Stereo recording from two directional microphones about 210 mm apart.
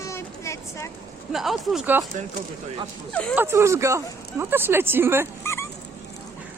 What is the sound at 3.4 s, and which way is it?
A woman's voice, 10° right (ahead or behind).